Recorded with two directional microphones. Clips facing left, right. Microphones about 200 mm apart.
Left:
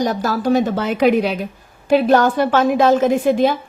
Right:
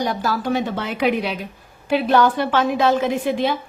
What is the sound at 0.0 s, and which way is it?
A woman's voice, 45° left (ahead or behind).